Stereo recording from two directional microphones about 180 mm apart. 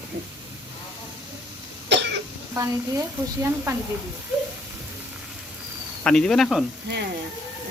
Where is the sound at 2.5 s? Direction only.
15° right (ahead or behind).